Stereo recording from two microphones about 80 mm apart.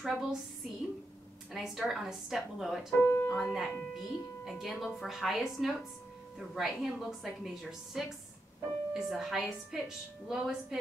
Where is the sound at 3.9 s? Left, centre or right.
Centre.